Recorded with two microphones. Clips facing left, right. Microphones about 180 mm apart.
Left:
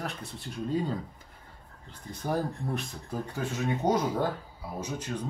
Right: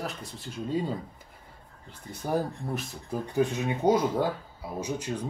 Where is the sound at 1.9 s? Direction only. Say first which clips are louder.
Right 2 dB; 5° right (ahead or behind).